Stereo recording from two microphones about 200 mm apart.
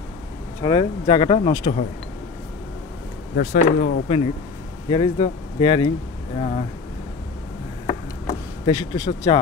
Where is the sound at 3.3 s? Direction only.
45° left (ahead or behind).